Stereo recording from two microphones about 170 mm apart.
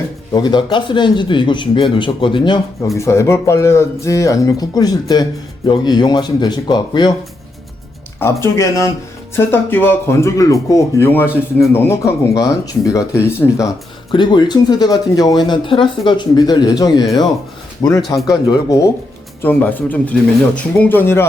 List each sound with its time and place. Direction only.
0.3 s speech: 25° left (ahead or behind)
3.0 s speech: 15° left (ahead or behind)
8.2 s speech: 15° left (ahead or behind)
14.1 s speech: 25° left (ahead or behind)
19.4 s speech: 10° left (ahead or behind)